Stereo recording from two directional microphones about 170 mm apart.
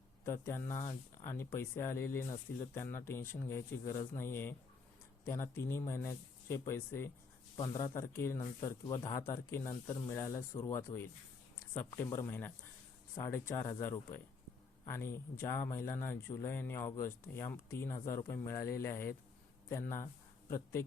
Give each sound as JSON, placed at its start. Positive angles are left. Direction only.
{"t": 0.3, "sound": "speech", "side_deg": 15}